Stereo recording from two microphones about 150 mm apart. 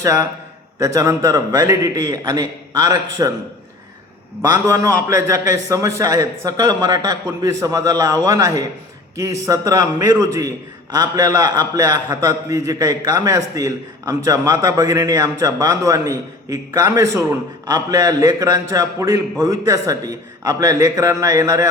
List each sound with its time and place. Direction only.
0.0 s a man's voice: 20° right (ahead or behind)
4.4 s a man's voice: 20° right (ahead or behind)